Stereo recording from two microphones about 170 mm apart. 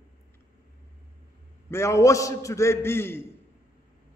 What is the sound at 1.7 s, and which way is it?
A man's voice, 15° left (ahead or behind).